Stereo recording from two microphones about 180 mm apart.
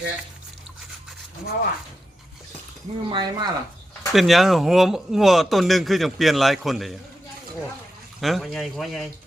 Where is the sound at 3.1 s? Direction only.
25° right (ahead or behind).